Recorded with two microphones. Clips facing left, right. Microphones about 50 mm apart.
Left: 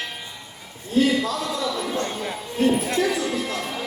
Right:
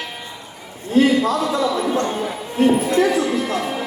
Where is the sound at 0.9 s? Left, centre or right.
Right.